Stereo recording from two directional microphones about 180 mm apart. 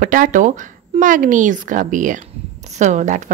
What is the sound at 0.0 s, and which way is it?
Speech, 50° right (ahead or behind).